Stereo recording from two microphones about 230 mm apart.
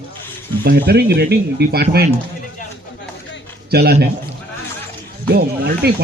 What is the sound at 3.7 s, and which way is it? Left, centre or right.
Speech, right.